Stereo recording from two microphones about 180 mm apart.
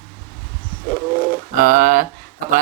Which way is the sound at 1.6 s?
50° right (ahead or behind).